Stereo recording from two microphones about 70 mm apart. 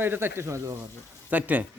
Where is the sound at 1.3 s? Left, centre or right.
Right.